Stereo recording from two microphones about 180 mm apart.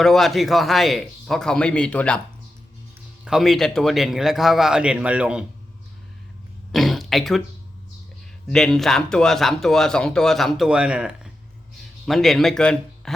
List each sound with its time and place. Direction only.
0.0 s speech: centre (ahead or behind)
3.2 s speech: centre (ahead or behind)
6.7 s throat clearing: centre (ahead or behind)
8.4 s speech: centre (ahead or behind)